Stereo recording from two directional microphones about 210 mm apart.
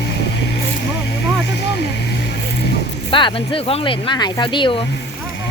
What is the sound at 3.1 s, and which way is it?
Speech, 25° left (ahead or behind).